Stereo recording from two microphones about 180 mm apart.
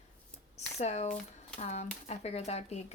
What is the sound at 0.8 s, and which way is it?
Speech, 40° left (ahead or behind).